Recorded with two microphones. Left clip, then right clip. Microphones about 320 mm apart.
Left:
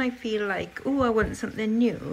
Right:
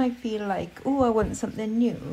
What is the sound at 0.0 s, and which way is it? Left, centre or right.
A woman's voice, centre.